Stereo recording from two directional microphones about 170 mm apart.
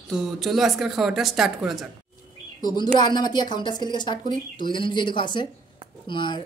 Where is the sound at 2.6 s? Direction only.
25° left (ahead or behind).